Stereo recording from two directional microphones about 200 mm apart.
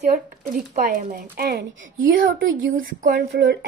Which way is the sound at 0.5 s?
45° right (ahead or behind).